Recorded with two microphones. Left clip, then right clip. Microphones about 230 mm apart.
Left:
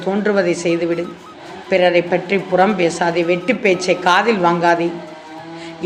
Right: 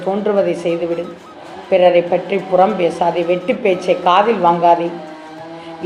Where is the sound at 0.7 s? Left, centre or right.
Left.